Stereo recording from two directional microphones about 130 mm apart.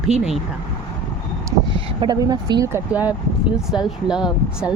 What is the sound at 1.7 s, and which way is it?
Speech, 35° right (ahead or behind).